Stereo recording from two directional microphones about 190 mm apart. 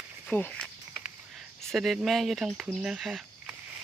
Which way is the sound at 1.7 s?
Centre (ahead or behind).